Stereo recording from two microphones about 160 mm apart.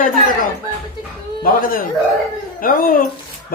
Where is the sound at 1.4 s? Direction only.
60° left (ahead or behind).